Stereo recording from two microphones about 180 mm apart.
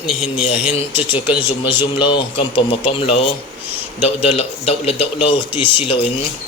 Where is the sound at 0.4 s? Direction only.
30° left (ahead or behind).